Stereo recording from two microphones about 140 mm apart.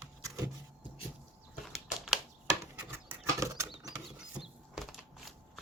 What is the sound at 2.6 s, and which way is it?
Rodents, 15° right (ahead or behind).